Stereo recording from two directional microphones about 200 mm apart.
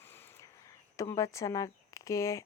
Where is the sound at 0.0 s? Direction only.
10° left (ahead or behind).